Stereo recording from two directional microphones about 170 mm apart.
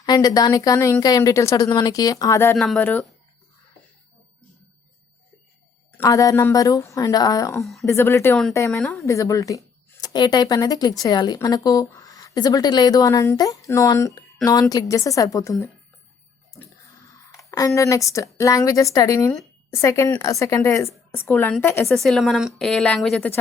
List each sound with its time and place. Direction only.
0.0 s speech: 25° left (ahead or behind)
2.6 s a woman's voice: 5° left (ahead or behind)
6.0 s speech: 20° left (ahead or behind)
7.5 s a woman's voice: centre (ahead or behind)
7.9 s a woman's voice: 15° left (ahead or behind)
17.7 s a woman's voice: 20° left (ahead or behind)
21.8 s a woman's voice: centre (ahead or behind)